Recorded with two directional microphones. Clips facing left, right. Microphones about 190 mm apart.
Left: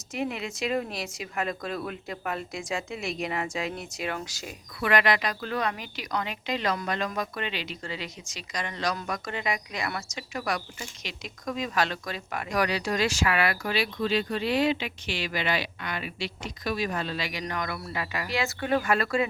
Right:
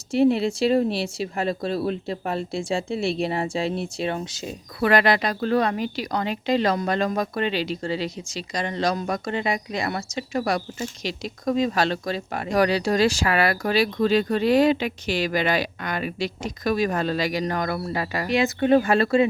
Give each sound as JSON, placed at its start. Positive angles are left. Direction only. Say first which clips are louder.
{"t": 0.1, "sound": "speech", "louder": "right 12 dB", "side_deg": -30}
{"t": 4.8, "sound": "speech", "louder": "right 5 dB", "side_deg": -35}
{"t": 18.3, "sound": "speech", "louder": "right 9 dB", "side_deg": -20}